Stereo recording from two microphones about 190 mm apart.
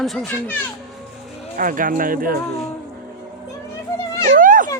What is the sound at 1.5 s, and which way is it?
Speech, 45° right (ahead or behind).